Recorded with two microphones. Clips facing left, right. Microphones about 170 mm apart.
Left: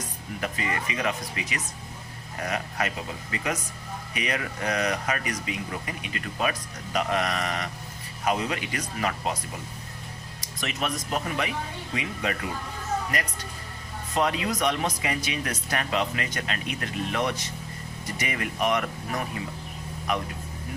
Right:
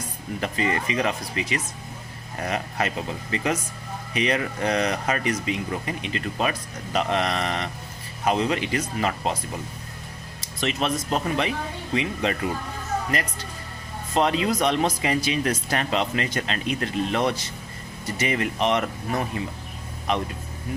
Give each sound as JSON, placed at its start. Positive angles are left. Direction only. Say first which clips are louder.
{"t": 0.3, "sound": "speech", "louder": "right 5 dB", "side_deg": -30}
{"t": 10.6, "sound": "speech", "louder": "right 5 dB", "side_deg": -30}